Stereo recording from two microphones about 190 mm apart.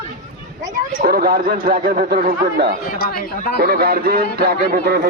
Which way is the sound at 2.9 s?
50° left (ahead or behind).